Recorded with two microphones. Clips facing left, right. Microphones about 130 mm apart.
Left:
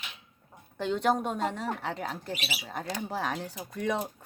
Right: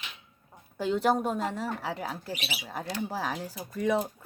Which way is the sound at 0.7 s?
5° right (ahead or behind).